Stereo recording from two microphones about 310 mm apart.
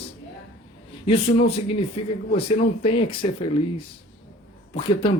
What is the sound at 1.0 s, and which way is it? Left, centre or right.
Speech, centre.